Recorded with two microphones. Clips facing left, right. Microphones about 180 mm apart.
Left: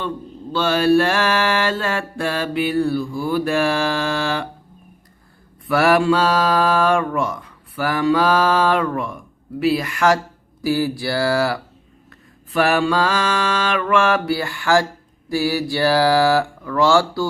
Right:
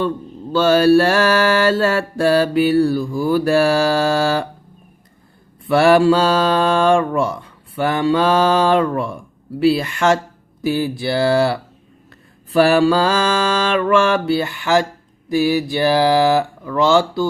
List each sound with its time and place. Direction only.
0.5 s mantra: 40° right (ahead or behind)
5.6 s mantra: 30° right (ahead or behind)